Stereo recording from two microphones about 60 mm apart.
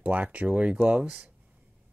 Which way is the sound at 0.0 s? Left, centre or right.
Right.